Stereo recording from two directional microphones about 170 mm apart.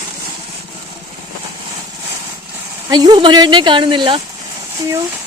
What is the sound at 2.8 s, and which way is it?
Speech, 25° right (ahead or behind).